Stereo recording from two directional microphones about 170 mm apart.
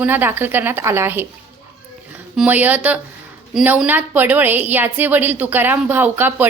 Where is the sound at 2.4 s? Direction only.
10° right (ahead or behind).